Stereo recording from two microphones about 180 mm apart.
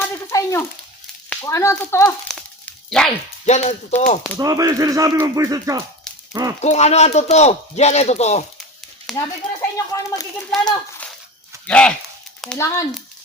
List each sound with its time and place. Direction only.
0.1 s a sound: 15° left (ahead or behind)
1.3 s speech: 15° left (ahead or behind)
2.3 s a sound: 5° left (ahead or behind)
3.4 s speech: 40° left (ahead or behind)
4.2 s speech: 20° right (ahead or behind)
6.1 s a sound: centre (ahead or behind)
6.6 s speech: 35° left (ahead or behind)
9.1 s speech: 15° left (ahead or behind)
10.5 s speech: centre (ahead or behind)
11.0 s dog: 10° left (ahead or behind)
11.6 s speech: 5° left (ahead or behind)
12.5 s speech: 15° left (ahead or behind)